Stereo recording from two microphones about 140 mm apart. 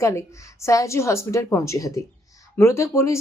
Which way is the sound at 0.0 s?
20° left (ahead or behind).